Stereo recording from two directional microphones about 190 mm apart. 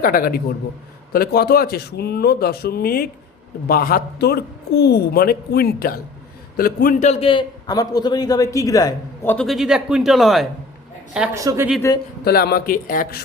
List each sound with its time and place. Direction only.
0.0 s a man's voice: 45° left (ahead or behind); by 9.3 s 20° left (ahead or behind)
9.3 s speech: centre (ahead or behind)
11.3 s speech: 15° right (ahead or behind)
12.2 s speech: 55° left (ahead or behind)